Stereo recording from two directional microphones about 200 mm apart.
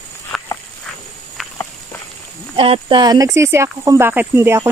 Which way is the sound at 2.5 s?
25° right (ahead or behind).